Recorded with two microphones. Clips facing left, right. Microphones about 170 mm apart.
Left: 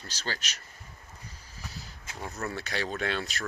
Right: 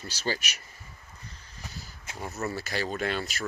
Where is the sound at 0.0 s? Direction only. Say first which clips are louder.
Right 5 dB; 10° right (ahead or behind).